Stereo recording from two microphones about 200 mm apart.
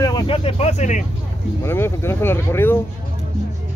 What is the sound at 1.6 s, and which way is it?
Speech, 10° left (ahead or behind).